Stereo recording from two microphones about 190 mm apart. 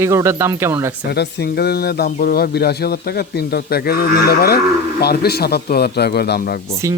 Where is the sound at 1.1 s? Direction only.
60° left (ahead or behind).